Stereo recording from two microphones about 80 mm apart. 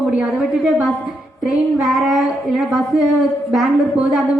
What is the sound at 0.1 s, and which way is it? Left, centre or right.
Speech, centre.